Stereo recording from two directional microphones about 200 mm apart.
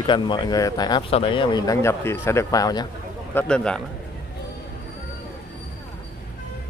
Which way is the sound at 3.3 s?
5° left (ahead or behind).